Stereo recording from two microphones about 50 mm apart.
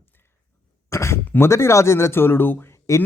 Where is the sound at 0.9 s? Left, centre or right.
Left.